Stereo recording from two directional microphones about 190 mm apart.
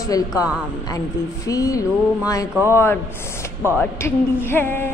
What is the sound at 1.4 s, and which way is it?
Speech, 15° left (ahead or behind).